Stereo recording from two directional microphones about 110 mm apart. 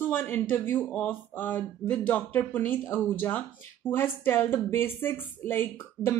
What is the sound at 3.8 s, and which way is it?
A woman's voice, 20° left (ahead or behind).